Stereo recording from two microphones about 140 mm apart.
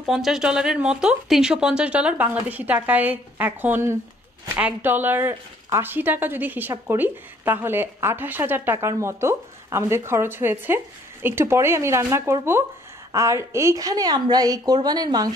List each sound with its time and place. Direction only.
0.0 s a woman's voice: centre (ahead or behind); by 15.3 s 30° right (ahead or behind)